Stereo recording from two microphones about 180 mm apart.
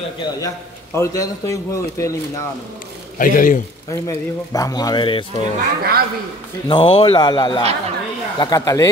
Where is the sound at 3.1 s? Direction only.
50° left (ahead or behind).